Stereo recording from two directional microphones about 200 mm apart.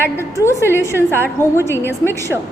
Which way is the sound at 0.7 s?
15° left (ahead or behind).